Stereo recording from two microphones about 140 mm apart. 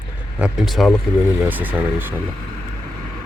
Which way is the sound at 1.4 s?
10° right (ahead or behind).